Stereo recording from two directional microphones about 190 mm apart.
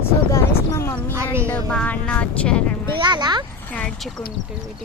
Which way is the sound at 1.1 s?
15° right (ahead or behind).